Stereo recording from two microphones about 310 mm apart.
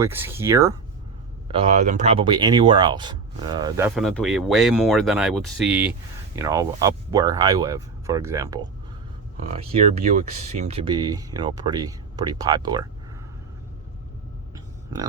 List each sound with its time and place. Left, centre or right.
0.0 s speech: centre
1.5 s speech: centre